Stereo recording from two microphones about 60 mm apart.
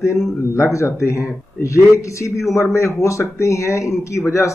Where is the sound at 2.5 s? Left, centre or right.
Left.